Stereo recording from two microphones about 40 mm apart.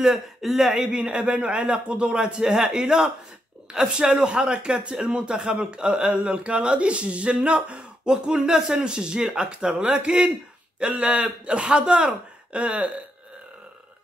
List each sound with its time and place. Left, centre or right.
0.0 s speech: centre
0.9 s speech: right
12.5 s a sound: right